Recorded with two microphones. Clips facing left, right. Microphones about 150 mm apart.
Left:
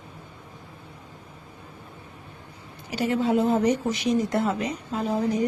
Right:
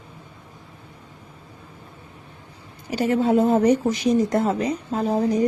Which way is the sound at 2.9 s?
45° right (ahead or behind).